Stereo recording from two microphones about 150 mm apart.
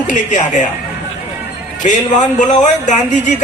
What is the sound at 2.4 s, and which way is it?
Speech, 55° left (ahead or behind).